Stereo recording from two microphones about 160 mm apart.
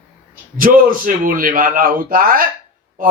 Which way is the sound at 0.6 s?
60° right (ahead or behind).